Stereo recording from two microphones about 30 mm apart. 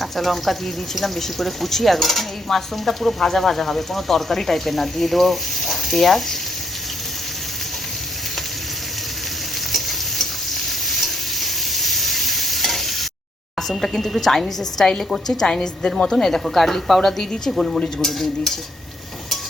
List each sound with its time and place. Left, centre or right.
0.0 s speech: centre
10.8 s stir: centre
13.6 s a woman's voice: centre
16.1 s a woman's voice: centre